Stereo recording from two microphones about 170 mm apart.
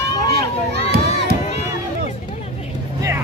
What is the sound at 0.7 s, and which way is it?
Crowd, 75° right (ahead or behind).